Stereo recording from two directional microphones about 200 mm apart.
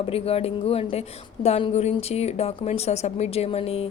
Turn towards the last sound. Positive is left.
turn(degrees=30)  # may be behind; listen again after turning